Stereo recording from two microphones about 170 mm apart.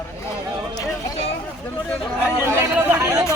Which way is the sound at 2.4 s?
10° right (ahead or behind).